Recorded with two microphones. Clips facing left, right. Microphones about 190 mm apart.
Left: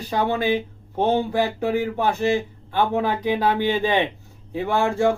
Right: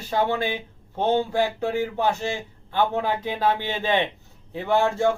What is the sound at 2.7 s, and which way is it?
Speech, 15° left (ahead or behind).